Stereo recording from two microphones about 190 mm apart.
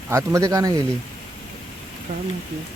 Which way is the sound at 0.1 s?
15° right (ahead or behind).